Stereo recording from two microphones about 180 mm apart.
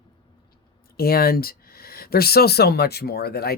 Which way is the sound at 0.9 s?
55° left (ahead or behind).